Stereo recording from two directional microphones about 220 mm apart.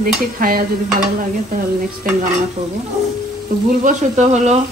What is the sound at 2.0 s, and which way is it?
Speech, 40° right (ahead or behind).